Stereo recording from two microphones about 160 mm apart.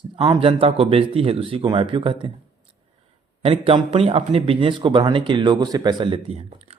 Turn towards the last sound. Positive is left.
turn(degrees=-40)  # may be behind; listen again after turning